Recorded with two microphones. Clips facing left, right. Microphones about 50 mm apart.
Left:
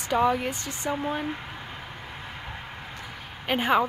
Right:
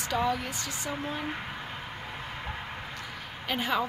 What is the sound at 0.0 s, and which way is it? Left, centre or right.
Speech, left.